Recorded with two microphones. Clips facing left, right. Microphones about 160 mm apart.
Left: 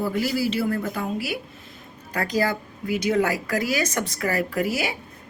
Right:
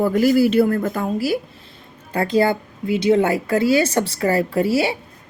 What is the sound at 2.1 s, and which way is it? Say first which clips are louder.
A woman's voice: right 6 dB; 25° right (ahead or behind).